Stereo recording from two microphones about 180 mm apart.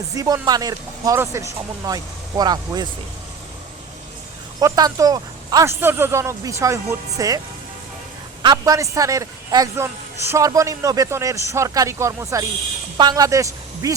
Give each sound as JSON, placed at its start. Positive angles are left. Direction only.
{"t": 0.1, "sound": "speech", "side_deg": -20}
{"t": 4.6, "sound": "a man's voice", "side_deg": -20}